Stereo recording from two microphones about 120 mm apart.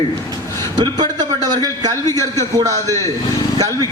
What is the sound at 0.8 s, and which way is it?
A man's voice, 35° right (ahead or behind).